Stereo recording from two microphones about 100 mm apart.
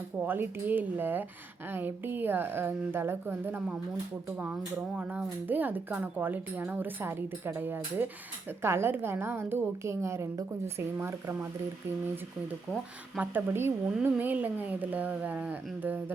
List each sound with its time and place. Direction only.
0.3 s a woman's voice: 20° right (ahead or behind)
13.1 s a woman's voice: 20° right (ahead or behind)